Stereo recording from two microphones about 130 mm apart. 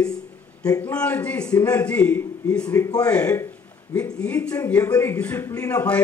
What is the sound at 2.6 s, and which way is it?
Speech, 25° left (ahead or behind).